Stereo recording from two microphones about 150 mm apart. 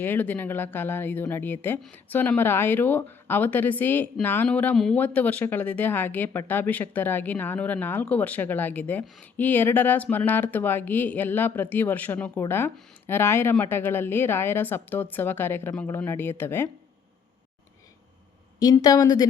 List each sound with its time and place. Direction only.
0.0 s a woman's voice: 15° left (ahead or behind)
18.6 s speech: 25° left (ahead or behind)